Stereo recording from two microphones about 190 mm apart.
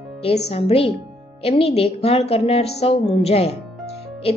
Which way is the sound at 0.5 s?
30° left (ahead or behind).